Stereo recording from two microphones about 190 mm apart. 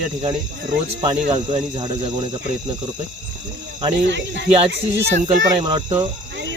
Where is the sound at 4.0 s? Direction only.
65° right (ahead or behind).